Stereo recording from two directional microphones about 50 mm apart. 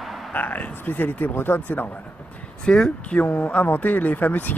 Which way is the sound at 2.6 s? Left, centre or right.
Centre.